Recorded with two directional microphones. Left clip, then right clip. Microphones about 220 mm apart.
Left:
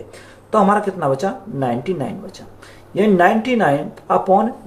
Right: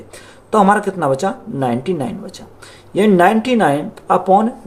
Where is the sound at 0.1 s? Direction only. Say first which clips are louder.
Right 1 dB; 40° right (ahead or behind).